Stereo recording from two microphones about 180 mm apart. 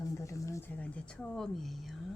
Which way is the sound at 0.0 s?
15° left (ahead or behind).